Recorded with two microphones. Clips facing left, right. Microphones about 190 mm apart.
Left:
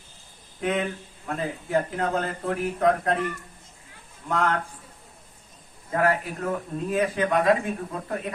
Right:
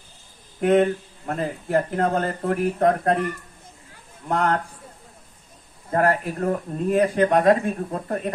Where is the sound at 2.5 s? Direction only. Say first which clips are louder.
Right 3 dB; 50° right (ahead or behind).